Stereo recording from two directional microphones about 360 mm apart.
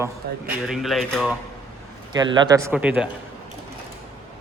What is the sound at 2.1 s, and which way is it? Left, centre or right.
Speech, centre.